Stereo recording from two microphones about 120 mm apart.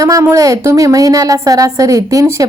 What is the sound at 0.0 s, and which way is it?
A woman's voice, 25° right (ahead or behind).